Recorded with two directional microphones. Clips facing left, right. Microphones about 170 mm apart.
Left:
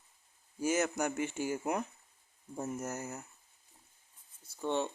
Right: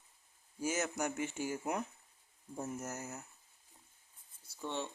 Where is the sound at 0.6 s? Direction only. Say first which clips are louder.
Left 5 dB; 60° left (ahead or behind).